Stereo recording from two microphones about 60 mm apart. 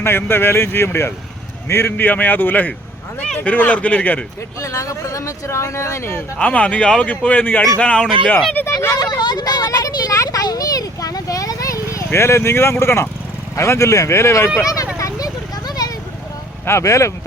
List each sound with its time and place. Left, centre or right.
0.0 s speech: left
4.6 s speech: left
6.4 s speech: left
7.8 s speech: centre
8.6 s speech: left
8.9 s speech: left
12.1 s speech: left
13.6 s speech: left
14.6 s a child's voice: left
14.9 s a sound: left
16.6 s speech: left